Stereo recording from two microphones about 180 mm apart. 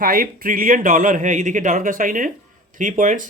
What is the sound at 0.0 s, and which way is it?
Speech, 50° right (ahead or behind).